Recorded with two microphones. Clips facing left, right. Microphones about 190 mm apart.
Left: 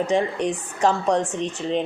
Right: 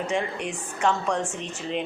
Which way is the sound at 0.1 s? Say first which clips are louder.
Left 6 dB; 35° left (ahead or behind).